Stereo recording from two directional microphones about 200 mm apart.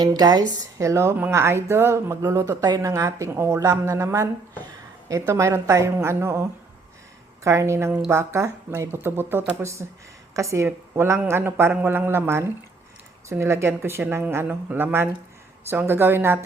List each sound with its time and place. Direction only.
0.0 s speech: 20° right (ahead or behind)
5.3 s speech: 15° right (ahead or behind)